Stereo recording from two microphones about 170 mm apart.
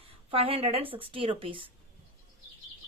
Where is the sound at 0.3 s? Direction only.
35° right (ahead or behind).